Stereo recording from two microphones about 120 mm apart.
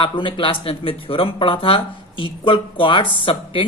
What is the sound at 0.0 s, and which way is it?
Speech, 45° left (ahead or behind).